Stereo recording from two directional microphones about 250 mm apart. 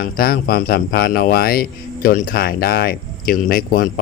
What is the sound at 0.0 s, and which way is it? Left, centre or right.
Speech, left.